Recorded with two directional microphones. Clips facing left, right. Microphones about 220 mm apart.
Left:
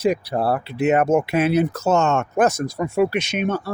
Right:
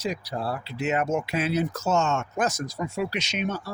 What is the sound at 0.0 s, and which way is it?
Speech, 60° left (ahead or behind).